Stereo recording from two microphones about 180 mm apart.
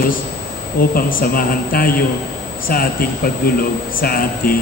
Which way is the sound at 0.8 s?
55° left (ahead or behind).